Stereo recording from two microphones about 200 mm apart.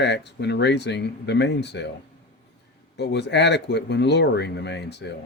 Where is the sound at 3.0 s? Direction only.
60° left (ahead or behind).